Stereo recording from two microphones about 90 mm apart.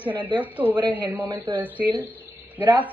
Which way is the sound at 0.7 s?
55° right (ahead or behind).